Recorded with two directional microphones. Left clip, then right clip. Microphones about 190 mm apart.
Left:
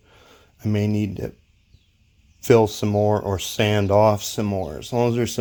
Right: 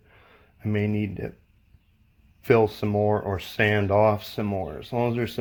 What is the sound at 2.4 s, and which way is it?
Speech, 45° left (ahead or behind).